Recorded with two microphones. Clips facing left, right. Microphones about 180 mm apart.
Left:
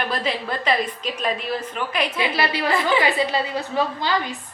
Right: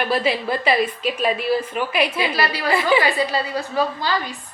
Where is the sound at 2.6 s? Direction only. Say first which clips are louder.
Right 4 dB; 10° right (ahead or behind).